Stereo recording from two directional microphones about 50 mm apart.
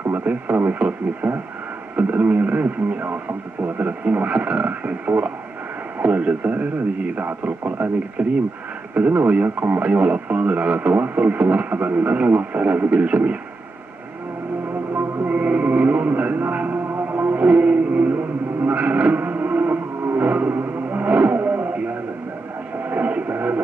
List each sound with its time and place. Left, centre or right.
0.2 s speech: right
4.0 s speech: right
7.6 s speech: right
8.2 s speech: right
15.2 s a sound: right
16.9 s music: right
17.4 s music: right
18.6 s a sound: right
20.2 s music: right
20.9 s vehicle: right
22.8 s radio: right